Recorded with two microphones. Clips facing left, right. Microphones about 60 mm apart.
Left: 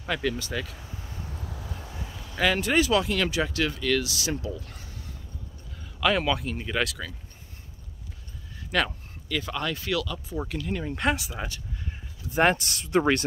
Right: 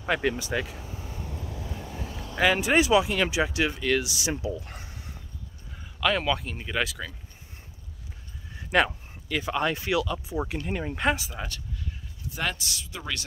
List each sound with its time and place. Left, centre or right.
0.0 s speech: right
2.3 s speech: centre
4.6 s a sound: right
5.9 s speech: centre
8.5 s speech: right
11.0 s speech: centre
12.4 s speech: left